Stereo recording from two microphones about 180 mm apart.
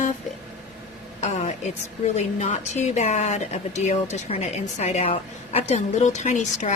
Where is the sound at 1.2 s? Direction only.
40° left (ahead or behind).